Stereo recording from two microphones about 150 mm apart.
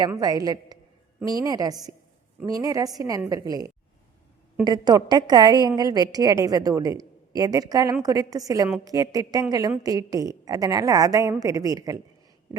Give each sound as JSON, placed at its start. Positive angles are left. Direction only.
{"t": 0.2, "sound": "a woman's voice", "side_deg": -25}